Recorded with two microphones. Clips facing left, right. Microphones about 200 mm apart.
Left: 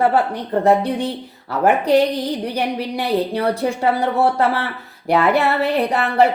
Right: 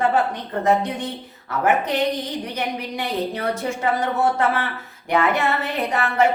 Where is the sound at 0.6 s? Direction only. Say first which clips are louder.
Left 4 dB; 30° left (ahead or behind).